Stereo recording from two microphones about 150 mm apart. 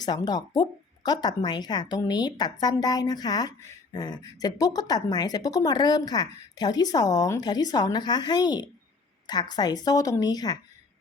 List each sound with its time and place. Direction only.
0.0 s speech: 25° left (ahead or behind)